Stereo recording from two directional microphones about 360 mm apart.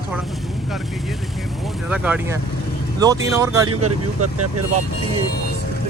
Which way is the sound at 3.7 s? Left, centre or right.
Right.